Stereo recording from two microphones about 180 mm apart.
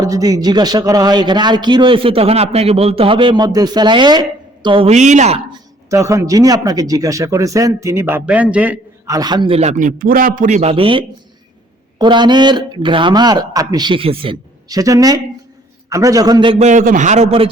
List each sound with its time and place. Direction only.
0.0 s speech: 20° right (ahead or behind); by 5.4 s 40° right (ahead or behind)
5.9 s speech: 15° right (ahead or behind)
9.1 s a man's voice: 25° right (ahead or behind)
16.6 s a man's voice: 45° right (ahead or behind)